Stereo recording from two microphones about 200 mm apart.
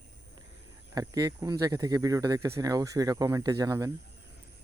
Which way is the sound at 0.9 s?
20° right (ahead or behind).